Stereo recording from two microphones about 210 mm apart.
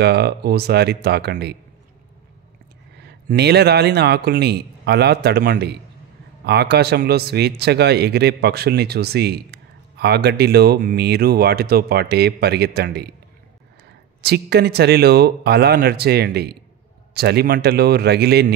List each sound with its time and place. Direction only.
0.0 s speech: 50° right (ahead or behind)
3.0 s speech: 50° right (ahead or behind)
14.2 s speech: 50° right (ahead or behind)